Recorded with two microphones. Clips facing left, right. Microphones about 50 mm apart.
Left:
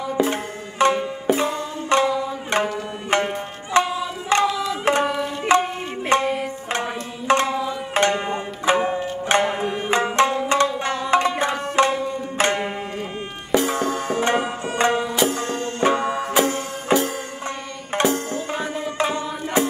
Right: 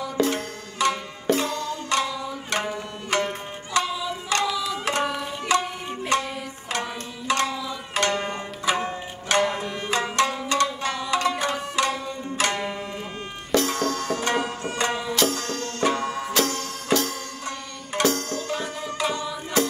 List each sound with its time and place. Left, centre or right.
0.2 s music: left
8.0 s music: left
15.1 s music: left